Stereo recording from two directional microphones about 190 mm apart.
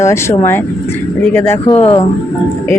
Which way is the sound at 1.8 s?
30° left (ahead or behind).